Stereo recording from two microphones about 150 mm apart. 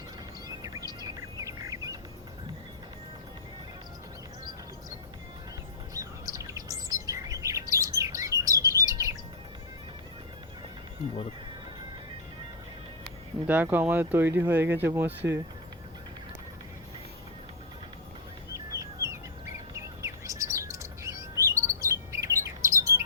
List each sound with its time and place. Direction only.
0.4 s bird: 25° right (ahead or behind)
5.9 s bird: 25° right (ahead or behind)
13.5 s speech: 10° right (ahead or behind)
18.5 s chicken: 20° right (ahead or behind)
19.7 s chirp: 20° right (ahead or behind)